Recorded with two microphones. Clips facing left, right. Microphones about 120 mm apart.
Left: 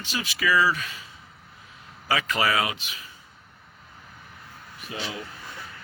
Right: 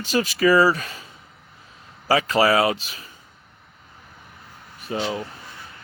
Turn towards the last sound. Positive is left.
turn(degrees=-30)  # may be behind; listen again after turning